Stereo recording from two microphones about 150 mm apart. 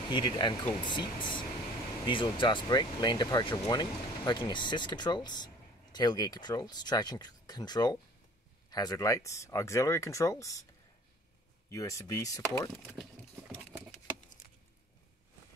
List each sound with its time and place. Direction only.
0.1 s speech: 30° left (ahead or behind)
11.7 s speech: 20° left (ahead or behind)